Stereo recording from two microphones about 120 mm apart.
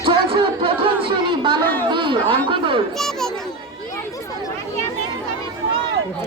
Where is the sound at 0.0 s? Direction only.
45° right (ahead or behind).